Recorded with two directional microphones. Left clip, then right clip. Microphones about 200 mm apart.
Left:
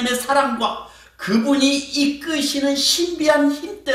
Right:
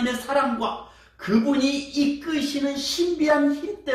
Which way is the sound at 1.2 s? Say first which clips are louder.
Left 4 dB; 40° left (ahead or behind).